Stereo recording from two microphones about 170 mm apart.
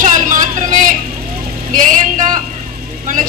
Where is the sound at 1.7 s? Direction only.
50° right (ahead or behind).